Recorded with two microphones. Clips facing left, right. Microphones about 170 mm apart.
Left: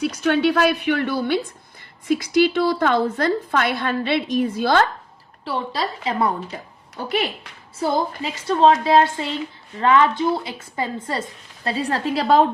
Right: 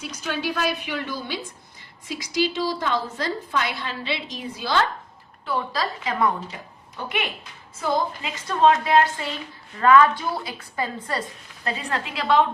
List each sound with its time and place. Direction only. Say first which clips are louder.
0.0 s a woman's voice: left 10 dB; 60° left (ahead or behind)
5.5 s a woman's voice: left 1 dB; 25° left (ahead or behind)